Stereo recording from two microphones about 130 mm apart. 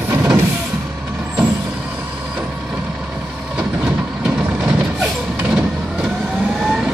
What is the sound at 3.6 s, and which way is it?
Vehicle, 5° right (ahead or behind).